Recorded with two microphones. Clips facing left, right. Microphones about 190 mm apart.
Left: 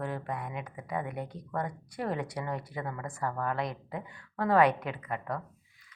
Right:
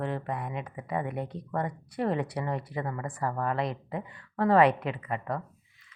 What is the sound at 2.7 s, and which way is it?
A woman's voice, centre (ahead or behind).